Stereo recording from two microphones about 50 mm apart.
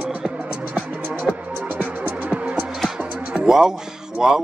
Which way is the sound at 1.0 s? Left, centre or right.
Right.